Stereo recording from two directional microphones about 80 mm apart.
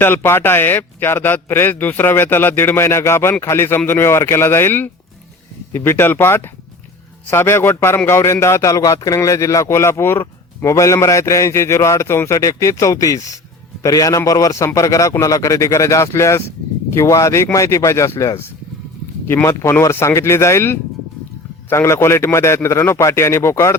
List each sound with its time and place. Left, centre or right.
0.0 s a man's voice: left
19.8 s a man's voice: left